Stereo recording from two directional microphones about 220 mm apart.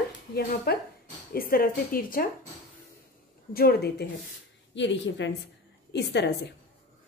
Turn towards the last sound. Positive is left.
turn(degrees=50)  # may be behind; listen again after turning